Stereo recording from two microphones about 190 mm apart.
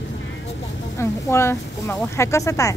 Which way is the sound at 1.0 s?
15° left (ahead or behind).